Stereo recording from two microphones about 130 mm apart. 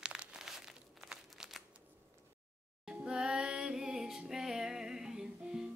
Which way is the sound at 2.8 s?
5° right (ahead or behind).